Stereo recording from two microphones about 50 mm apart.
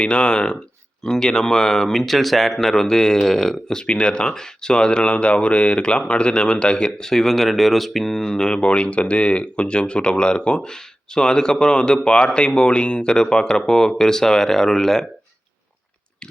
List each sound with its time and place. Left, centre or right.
0.0 s speech: centre